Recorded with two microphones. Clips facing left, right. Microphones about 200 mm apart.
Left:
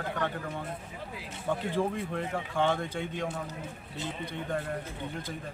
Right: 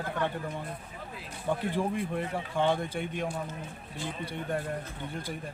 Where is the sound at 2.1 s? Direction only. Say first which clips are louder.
Even; 15° right (ahead or behind).